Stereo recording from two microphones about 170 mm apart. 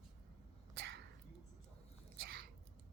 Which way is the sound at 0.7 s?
80° right.